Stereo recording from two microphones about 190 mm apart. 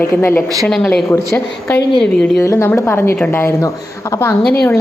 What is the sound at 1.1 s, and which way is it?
A woman's voice, 15° left (ahead or behind).